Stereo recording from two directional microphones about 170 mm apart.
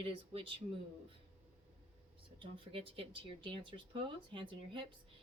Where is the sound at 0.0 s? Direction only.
30° right (ahead or behind).